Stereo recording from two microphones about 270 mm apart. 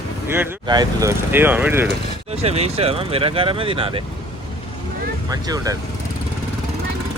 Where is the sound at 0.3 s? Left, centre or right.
Centre.